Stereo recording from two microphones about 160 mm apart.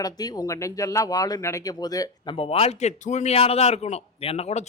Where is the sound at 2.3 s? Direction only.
35° left (ahead or behind).